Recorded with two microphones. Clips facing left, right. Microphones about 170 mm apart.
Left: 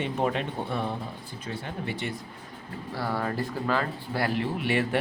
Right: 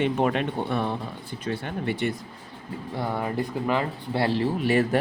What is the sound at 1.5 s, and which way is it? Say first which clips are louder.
Speech: right 6 dB; 70° right (ahead or behind).